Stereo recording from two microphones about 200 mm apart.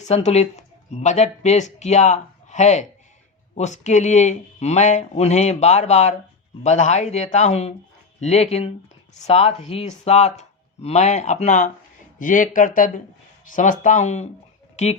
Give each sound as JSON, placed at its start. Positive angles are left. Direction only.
{"t": 0.0, "sound": "speech", "side_deg": 35}